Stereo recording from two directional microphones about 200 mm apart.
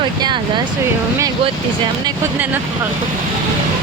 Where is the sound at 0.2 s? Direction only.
20° right (ahead or behind).